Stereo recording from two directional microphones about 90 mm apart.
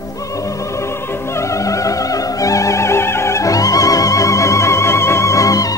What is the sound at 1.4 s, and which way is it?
Music, 35° left (ahead or behind).